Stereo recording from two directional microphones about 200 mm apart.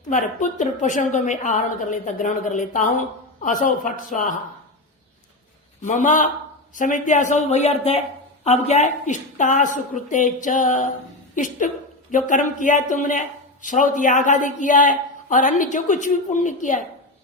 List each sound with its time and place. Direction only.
0.1 s a man's voice: 40° left (ahead or behind)
5.8 s a man's voice: 40° left (ahead or behind)